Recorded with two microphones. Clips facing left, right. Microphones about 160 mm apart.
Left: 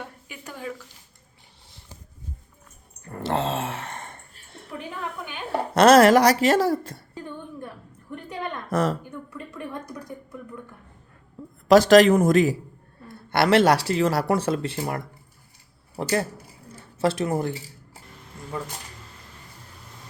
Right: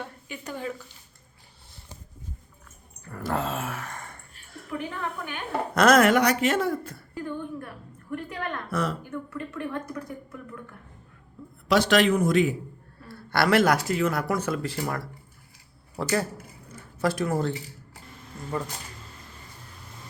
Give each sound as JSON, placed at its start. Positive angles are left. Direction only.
{"t": 0.0, "sound": "a sound", "side_deg": 5}
{"t": 3.1, "sound": "dog", "side_deg": 25}
{"t": 5.5, "sound": "a woman's voice", "side_deg": 25}
{"t": 7.1, "sound": "a sound", "side_deg": 20}
{"t": 8.1, "sound": "a woman's voice", "side_deg": 20}
{"t": 8.7, "sound": "a woman's voice", "side_deg": 40}
{"t": 9.0, "sound": "speech", "side_deg": 15}
{"t": 11.7, "sound": "speech", "side_deg": 40}
{"t": 13.1, "sound": "speech", "side_deg": 20}